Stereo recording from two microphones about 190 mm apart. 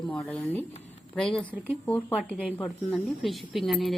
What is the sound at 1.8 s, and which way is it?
Speech, 10° left (ahead or behind).